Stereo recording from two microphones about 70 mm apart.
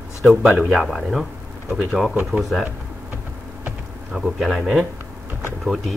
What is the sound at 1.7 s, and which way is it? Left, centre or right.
Speech, centre.